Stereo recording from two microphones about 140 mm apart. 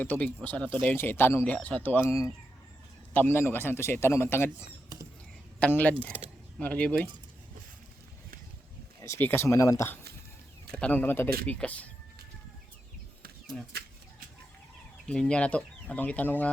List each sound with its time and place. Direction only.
0.0 s a man's voice: 10° left (ahead or behind)
5.5 s a man's voice: 10° left (ahead or behind)
9.0 s speech: 20° left (ahead or behind)
10.7 s a man's voice: 5° left (ahead or behind)
15.0 s a man's voice: 5° left (ahead or behind)